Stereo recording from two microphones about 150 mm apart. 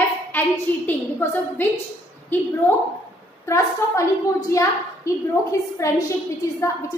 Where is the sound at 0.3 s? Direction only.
10° left (ahead or behind).